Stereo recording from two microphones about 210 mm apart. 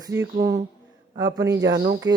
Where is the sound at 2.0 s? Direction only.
60° right (ahead or behind).